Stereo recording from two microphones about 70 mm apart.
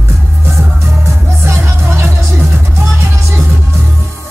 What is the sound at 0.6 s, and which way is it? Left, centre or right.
Music, right.